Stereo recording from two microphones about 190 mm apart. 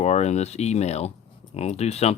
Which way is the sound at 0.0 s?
35° left (ahead or behind).